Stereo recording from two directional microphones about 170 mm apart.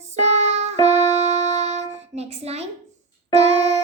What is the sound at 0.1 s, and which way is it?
Music, 40° right (ahead or behind).